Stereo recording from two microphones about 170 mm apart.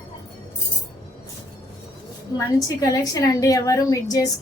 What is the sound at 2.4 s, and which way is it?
A woman's voice, 20° left (ahead or behind).